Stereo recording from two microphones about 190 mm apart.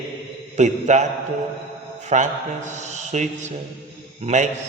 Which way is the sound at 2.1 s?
40° right (ahead or behind).